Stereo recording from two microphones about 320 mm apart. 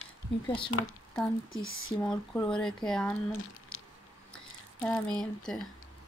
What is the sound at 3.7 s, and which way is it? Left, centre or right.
Squish, left.